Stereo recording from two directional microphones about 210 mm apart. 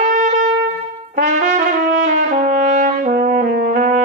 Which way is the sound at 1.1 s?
35° right (ahead or behind).